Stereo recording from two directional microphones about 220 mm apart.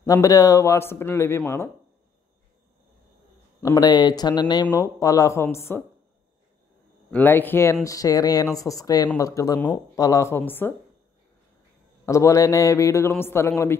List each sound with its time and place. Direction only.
0.0 s speech: 15° left (ahead or behind)
3.6 s speech: 15° left (ahead or behind)
7.1 s speech: 10° left (ahead or behind)
12.1 s speech: 15° left (ahead or behind)